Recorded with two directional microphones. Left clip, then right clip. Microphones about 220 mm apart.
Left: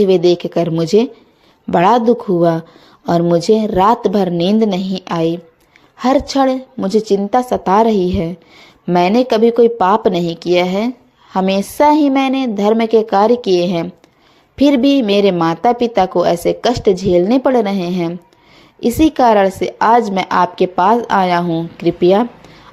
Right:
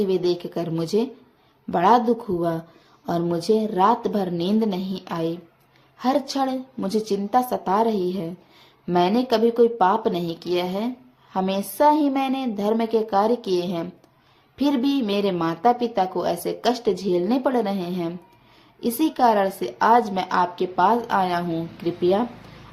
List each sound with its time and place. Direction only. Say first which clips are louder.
0.0 s speech: left 11 dB; 30° left (ahead or behind)